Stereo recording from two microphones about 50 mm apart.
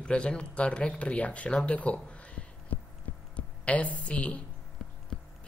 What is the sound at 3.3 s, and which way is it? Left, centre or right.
Speech, left.